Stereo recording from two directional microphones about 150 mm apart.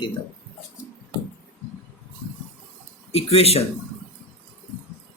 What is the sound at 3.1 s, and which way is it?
Speech, 40° left (ahead or behind).